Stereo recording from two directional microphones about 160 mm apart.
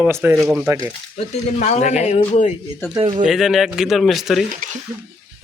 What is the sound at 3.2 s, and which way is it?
Speech, 5° right (ahead or behind).